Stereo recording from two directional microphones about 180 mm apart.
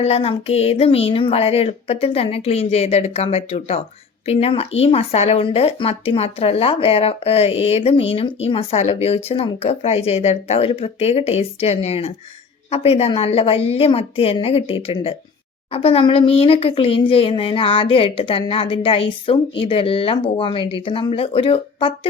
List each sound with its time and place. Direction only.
0.0 s speech: 35° left (ahead or behind)